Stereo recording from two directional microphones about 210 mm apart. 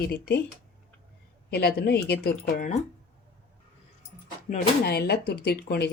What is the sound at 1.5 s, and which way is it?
Speech, 50° left (ahead or behind).